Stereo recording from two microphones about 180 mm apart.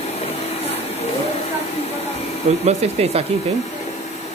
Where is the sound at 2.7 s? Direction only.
35° right (ahead or behind).